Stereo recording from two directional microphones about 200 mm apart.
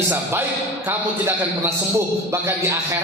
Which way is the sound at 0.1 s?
10° right (ahead or behind).